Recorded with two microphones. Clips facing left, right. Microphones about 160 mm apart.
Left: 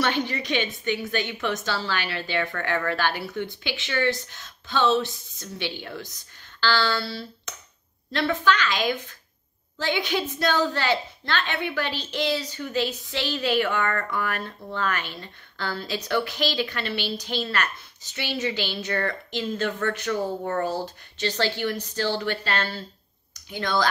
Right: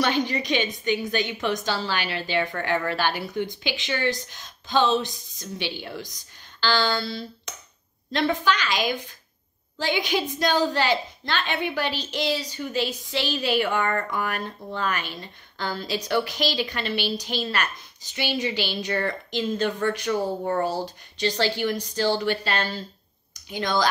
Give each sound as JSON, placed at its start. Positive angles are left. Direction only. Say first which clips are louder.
{"t": 0.0, "sound": "a woman's voice", "louder": "right 2 dB", "side_deg": -15}
{"t": 20.1, "sound": "speech", "louder": "right 2 dB", "side_deg": -25}
{"t": 20.6, "sound": "a woman's voice", "louder": "right 1 dB", "side_deg": -15}